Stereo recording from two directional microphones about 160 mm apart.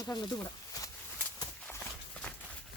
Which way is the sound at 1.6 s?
10° left (ahead or behind).